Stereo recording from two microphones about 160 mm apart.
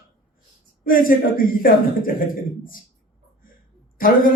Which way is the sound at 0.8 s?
60° left (ahead or behind).